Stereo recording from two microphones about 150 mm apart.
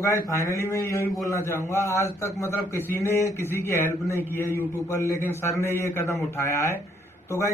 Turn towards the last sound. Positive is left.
turn(degrees=20)  # may be behind; listen again after turning